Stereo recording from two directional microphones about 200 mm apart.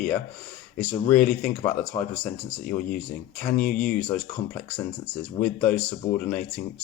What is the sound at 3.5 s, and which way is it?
Speech, 45° left (ahead or behind).